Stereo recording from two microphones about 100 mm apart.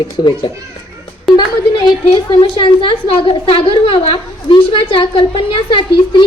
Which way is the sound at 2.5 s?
60° left (ahead or behind).